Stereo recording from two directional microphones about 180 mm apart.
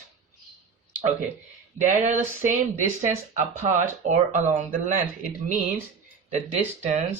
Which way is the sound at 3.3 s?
40° right (ahead or behind).